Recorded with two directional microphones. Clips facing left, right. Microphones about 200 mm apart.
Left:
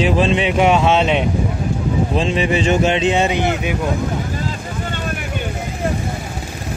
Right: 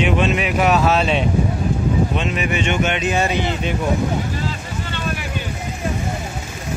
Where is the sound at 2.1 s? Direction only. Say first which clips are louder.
Left 4 dB; 30° left (ahead or behind).